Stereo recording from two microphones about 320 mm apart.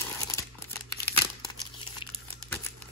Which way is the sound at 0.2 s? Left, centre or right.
Centre.